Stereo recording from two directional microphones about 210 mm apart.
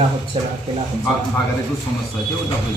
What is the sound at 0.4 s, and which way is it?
Speech, 25° right (ahead or behind).